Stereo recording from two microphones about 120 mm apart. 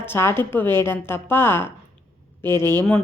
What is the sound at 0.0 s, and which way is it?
A woman's voice, 20° left (ahead or behind).